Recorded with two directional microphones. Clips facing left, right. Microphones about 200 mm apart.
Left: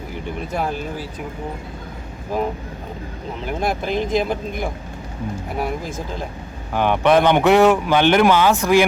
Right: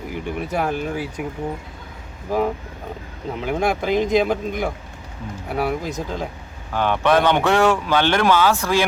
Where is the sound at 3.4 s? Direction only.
10° right (ahead or behind).